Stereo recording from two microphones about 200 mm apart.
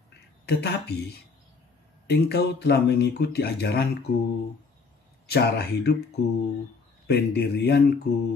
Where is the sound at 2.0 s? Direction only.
55° left (ahead or behind).